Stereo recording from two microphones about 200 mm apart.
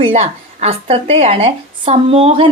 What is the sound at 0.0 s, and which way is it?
A woman's voice, 30° right (ahead or behind).